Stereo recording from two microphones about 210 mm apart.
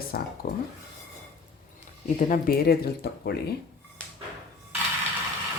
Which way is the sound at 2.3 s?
45° left (ahead or behind).